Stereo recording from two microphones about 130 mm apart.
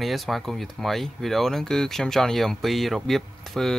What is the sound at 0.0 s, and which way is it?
Speech, centre (ahead or behind).